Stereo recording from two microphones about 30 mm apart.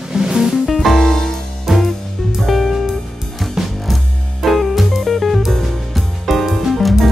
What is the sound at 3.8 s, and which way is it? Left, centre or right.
Music, centre.